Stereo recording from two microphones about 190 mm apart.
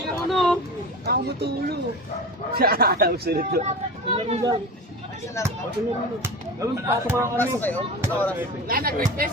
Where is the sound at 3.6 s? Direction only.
35° right (ahead or behind).